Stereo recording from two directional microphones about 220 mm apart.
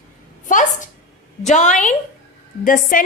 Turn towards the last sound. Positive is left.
turn(degrees=40)  # may be behind; listen again after turning